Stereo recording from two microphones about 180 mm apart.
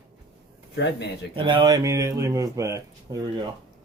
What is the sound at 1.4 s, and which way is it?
Speech, 25° right (ahead or behind).